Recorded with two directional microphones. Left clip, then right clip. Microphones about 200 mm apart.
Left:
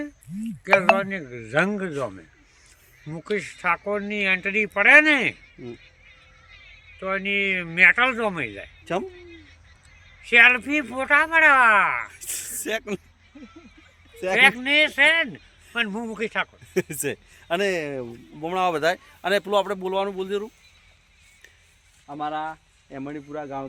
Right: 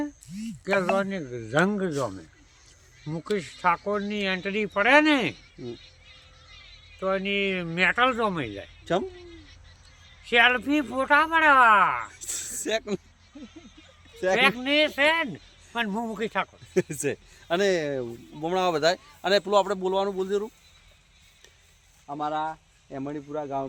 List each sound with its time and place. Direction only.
0.9 s speech: 10° right (ahead or behind)
3.2 s speech: 10° right (ahead or behind)
7.0 s speech: 15° right (ahead or behind)
8.8 s speech: centre (ahead or behind)
10.2 s speech: 15° right (ahead or behind)
12.1 s a sound: 10° left (ahead or behind)
12.5 s speech: 10° left (ahead or behind)
14.3 s speech: 15° right (ahead or behind)
16.7 s speech: 10° left (ahead or behind)
18.0 s speech: 15° left (ahead or behind)
22.0 s speech: 10° left (ahead or behind)